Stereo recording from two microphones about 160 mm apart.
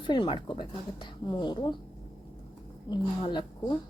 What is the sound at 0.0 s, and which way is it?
Speech, 30° left (ahead or behind).